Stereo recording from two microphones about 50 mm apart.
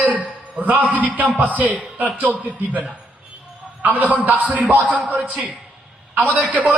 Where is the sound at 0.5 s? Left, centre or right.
Right.